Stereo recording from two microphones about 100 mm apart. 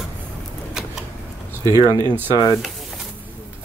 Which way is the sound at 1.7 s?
40° left (ahead or behind).